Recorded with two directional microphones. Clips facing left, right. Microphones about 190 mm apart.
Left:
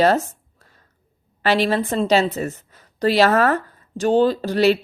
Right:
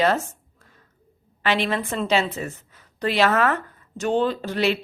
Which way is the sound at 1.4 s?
35° left (ahead or behind).